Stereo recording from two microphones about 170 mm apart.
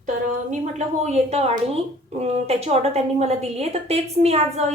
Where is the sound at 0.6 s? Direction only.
40° right (ahead or behind).